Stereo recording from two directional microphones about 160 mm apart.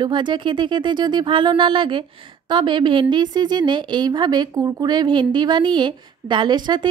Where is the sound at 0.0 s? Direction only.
30° right (ahead or behind).